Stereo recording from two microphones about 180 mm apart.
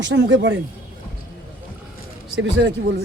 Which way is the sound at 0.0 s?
90° right.